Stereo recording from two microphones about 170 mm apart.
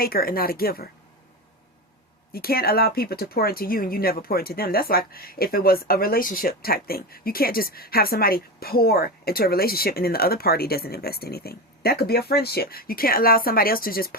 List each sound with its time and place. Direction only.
0.0 s speech: 60° left (ahead or behind)
2.3 s speech: 65° left (ahead or behind)